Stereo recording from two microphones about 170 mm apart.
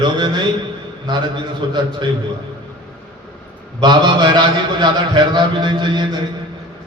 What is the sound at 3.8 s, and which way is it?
A man's voice, 25° right (ahead or behind).